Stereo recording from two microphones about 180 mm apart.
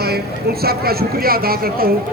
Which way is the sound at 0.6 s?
60° right (ahead or behind).